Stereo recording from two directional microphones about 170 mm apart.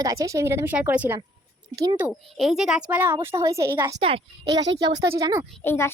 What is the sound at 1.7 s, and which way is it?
Speech, 20° right (ahead or behind).